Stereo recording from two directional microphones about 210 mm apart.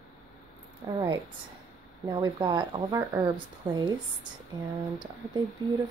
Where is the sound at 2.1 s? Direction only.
20° right (ahead or behind).